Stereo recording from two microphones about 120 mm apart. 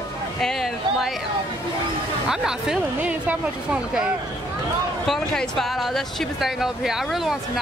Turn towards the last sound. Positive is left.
turn(degrees=0)  # may be behind; listen again after turning